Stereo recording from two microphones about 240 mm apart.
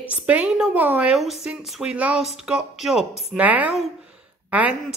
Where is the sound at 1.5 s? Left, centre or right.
Centre.